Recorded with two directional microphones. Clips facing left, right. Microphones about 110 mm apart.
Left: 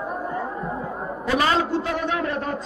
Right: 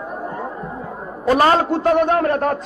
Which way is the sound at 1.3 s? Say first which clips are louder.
Right 6 dB; 45° right (ahead or behind).